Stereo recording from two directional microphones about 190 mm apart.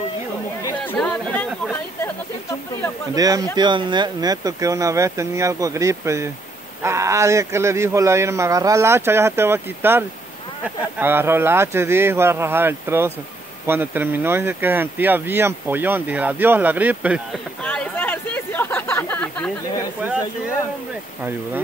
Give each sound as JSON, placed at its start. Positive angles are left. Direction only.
{"t": 0.8, "sound": "chatter", "side_deg": 5}
{"t": 3.2, "sound": "speech", "side_deg": -20}
{"t": 17.6, "sound": "a sound", "side_deg": 5}